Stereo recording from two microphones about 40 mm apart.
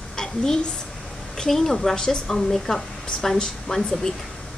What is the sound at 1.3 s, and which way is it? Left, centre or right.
Speech, centre.